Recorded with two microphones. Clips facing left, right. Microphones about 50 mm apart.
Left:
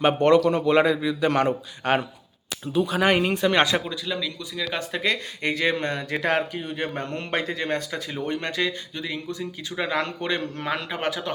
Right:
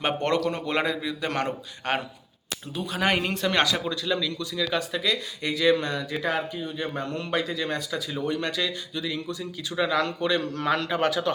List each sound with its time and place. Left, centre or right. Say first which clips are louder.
0.0 s a man's voice: left 7 dB; centre
3.6 s speech: left 3 dB; left
4.0 s speech: right 2 dB; centre
4.8 s a man's voice: left 1 dB; left
6.1 s a man's voice: left 4 dB; left
10.6 s speech: right 3 dB; centre